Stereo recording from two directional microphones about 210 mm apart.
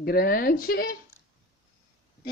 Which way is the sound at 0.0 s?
45° left (ahead or behind).